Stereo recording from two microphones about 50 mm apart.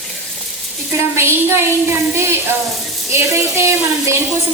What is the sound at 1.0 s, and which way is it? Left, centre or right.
A woman's voice, right.